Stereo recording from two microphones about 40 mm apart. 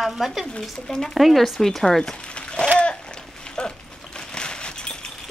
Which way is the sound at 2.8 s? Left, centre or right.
Left.